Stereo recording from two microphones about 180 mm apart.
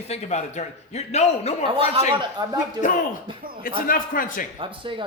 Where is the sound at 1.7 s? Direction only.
30° right (ahead or behind).